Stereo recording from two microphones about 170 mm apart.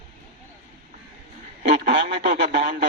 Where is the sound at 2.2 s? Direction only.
70° right (ahead or behind).